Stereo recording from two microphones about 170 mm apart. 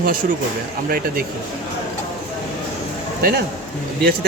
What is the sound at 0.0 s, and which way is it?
Speech, 55° right (ahead or behind).